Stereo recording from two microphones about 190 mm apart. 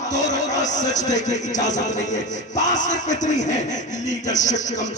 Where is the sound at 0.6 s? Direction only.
40° left (ahead or behind).